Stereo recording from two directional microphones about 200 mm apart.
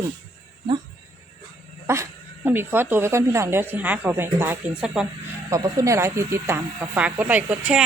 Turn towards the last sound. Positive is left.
turn(degrees=-5)  # may be behind; listen again after turning